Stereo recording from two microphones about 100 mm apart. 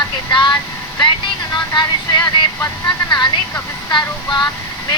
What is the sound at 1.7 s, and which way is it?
Speech, 45° left (ahead or behind).